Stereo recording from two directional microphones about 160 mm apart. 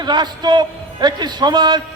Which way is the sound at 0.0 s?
25° right (ahead or behind).